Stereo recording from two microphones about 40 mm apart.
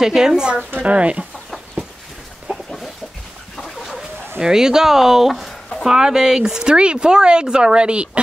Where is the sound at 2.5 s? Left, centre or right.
Right.